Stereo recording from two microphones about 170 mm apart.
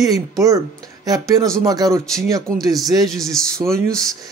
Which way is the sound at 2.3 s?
20° right (ahead or behind).